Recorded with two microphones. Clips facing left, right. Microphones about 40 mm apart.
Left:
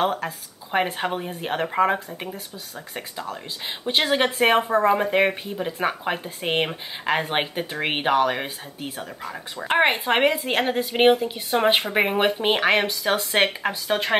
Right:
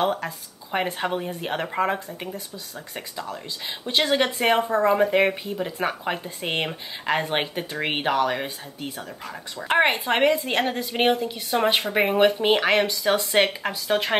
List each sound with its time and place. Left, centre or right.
0.2 s a woman's voice: centre